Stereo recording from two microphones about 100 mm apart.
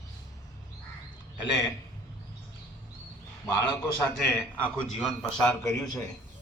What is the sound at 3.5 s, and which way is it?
Speech, 25° left (ahead or behind).